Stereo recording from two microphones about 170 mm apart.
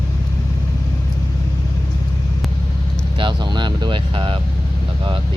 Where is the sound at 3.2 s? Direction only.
25° right (ahead or behind).